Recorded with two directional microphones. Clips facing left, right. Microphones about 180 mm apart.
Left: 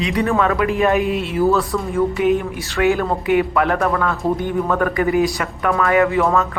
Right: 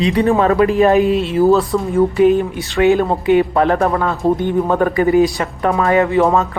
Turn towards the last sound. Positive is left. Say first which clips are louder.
# right 3 dB
turn(degrees=-30)  # may be behind; listen again after turning